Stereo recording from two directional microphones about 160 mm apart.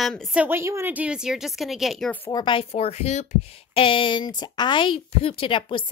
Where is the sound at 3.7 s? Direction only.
35° left (ahead or behind).